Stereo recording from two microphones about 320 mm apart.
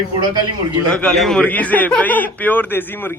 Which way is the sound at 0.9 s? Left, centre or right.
Centre.